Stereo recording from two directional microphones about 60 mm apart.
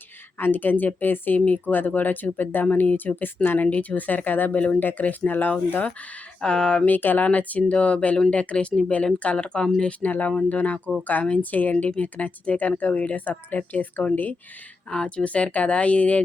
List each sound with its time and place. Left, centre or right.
0.3 s speech: left
3.7 s speech: left
6.4 s speech: centre
6.8 s speech: left
14.8 s speech: centre